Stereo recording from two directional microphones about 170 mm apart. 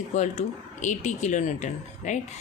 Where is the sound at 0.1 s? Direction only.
45° left (ahead or behind).